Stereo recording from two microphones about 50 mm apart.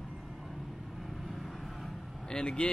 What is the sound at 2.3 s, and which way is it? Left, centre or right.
Speech, centre.